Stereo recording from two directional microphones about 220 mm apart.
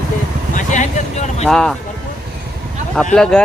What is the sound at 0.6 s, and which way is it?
Vehicle, 35° left (ahead or behind).